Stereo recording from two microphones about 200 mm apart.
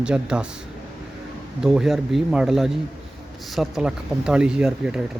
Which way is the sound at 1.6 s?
Centre (ahead or behind).